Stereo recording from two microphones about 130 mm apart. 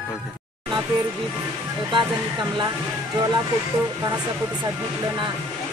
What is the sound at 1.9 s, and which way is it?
Speech, 35° right (ahead or behind).